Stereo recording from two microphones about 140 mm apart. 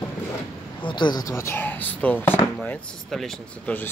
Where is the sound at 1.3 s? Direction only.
15° left (ahead or behind).